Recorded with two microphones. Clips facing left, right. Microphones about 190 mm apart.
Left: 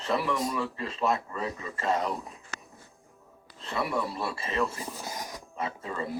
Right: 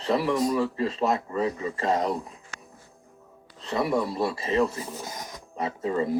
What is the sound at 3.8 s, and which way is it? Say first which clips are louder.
Speech: right 6 dB; 35° right (ahead or behind).